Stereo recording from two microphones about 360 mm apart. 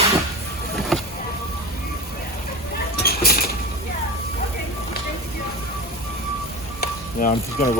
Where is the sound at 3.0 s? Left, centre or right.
Left.